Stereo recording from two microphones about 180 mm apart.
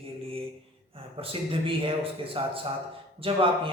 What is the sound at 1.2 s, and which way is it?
A man's voice, 30° right (ahead or behind).